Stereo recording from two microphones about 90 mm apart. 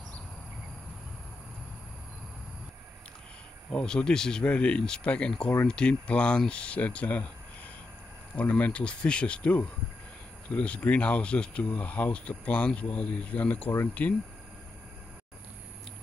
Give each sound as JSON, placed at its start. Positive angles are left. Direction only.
{"t": 3.7, "sound": "speech", "side_deg": 10}